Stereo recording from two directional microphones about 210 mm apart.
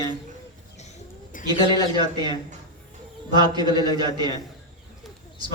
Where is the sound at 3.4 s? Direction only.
20° right (ahead or behind).